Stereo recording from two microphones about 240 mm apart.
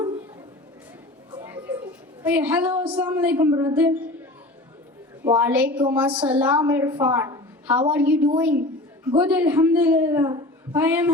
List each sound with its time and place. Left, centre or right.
1.4 s a sound: centre
2.9 s a man's voice: centre
5.3 s a man's voice: centre